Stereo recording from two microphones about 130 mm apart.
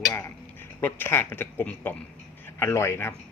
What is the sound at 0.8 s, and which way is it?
A man's voice, 15° left (ahead or behind).